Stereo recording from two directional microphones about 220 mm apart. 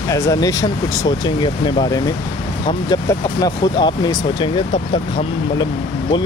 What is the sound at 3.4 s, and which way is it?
Speech, 20° left (ahead or behind).